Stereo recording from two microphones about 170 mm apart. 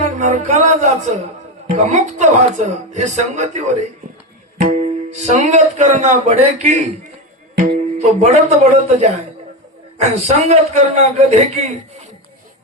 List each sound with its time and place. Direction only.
0.0 s music: 45° right (ahead or behind)
1.6 s a man's voice: 45° right (ahead or behind)